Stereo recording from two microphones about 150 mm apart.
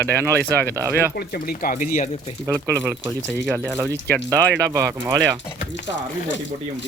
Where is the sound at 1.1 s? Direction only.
90° left; by 2.0 s 55° left (ahead or behind).